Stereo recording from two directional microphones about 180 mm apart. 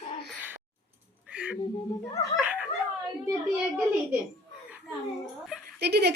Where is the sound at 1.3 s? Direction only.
10° right (ahead or behind).